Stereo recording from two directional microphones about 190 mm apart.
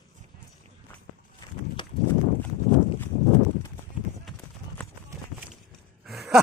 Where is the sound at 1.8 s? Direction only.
25° left (ahead or behind).